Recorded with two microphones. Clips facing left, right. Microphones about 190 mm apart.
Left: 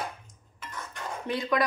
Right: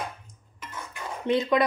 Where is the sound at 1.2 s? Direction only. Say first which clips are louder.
Right 6 dB; 20° right (ahead or behind).